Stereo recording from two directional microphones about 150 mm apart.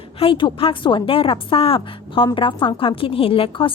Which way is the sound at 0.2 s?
35° left (ahead or behind).